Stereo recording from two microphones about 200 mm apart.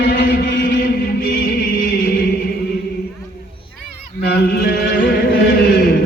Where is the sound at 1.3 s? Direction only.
60° left (ahead or behind).